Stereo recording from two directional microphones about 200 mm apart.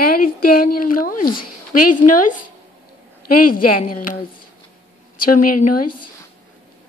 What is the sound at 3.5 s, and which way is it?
Speech, 45° left (ahead or behind).